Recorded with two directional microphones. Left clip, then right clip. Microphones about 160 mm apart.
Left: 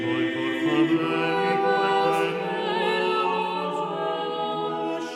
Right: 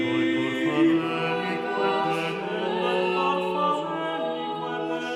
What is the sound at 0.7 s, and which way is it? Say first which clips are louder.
Music: even; centre (ahead or behind).